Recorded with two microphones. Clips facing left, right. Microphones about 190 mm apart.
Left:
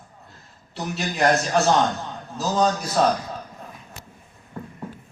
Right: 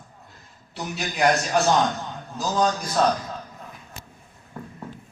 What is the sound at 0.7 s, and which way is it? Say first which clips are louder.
A man's voice: left 2 dB; centre (ahead or behind).